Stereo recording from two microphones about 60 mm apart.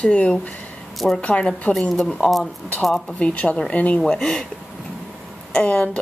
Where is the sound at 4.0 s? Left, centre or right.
Centre.